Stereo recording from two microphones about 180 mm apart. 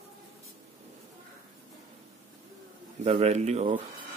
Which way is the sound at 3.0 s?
35° right (ahead or behind).